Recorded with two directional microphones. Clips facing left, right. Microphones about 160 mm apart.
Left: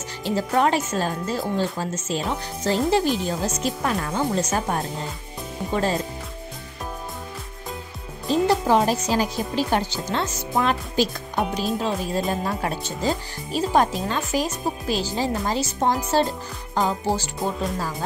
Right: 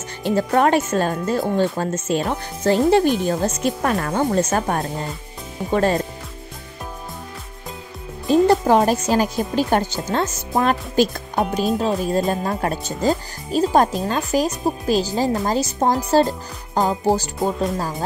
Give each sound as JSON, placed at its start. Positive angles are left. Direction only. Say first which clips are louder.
{"t": 0.2, "sound": "speech", "louder": "right 4 dB", "side_deg": -55}
{"t": 8.3, "sound": "speech", "louder": "right 5 dB", "side_deg": -50}